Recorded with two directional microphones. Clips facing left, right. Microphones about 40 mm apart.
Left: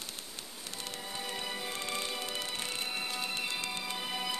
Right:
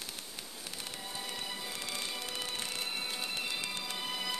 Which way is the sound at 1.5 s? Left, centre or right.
Left.